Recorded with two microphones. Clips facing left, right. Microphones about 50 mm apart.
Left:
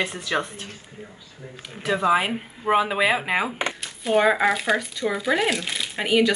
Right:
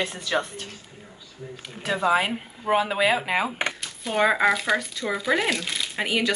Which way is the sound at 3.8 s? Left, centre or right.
Centre.